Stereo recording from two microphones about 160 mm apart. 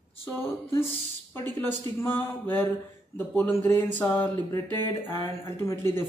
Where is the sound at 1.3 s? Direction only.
15° left (ahead or behind).